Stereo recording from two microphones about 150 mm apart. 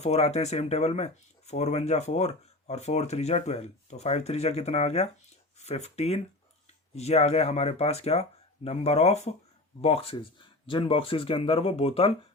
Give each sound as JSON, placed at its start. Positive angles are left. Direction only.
{"t": 0.0, "sound": "speech", "side_deg": 45}